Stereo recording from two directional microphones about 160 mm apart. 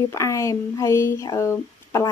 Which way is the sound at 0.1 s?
20° left (ahead or behind).